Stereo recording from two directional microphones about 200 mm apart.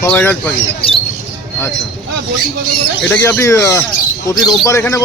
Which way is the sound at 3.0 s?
10° left (ahead or behind).